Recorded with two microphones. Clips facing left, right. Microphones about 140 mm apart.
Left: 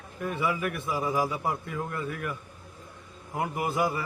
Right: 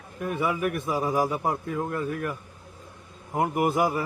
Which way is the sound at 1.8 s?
30° right (ahead or behind).